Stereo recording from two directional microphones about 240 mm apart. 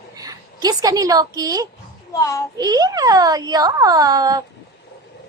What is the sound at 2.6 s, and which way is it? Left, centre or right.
Speech, centre.